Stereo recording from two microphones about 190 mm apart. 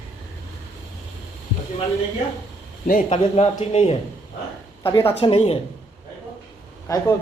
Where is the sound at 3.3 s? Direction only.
35° left (ahead or behind).